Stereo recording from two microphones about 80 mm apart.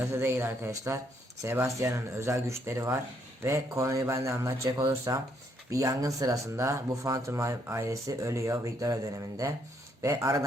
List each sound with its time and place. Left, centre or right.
0.0 s speech: right